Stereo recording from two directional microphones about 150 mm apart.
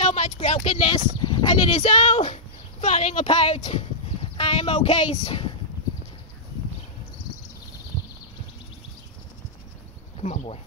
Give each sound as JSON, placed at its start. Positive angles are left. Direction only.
{"t": 0.0, "sound": "speech", "side_deg": 45}
{"t": 1.8, "sound": "speech", "side_deg": 45}
{"t": 10.2, "sound": "speech", "side_deg": 50}